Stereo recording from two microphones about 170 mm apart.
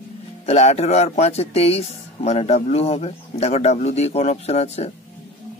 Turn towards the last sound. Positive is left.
turn(degrees=40)  # may be behind; listen again after turning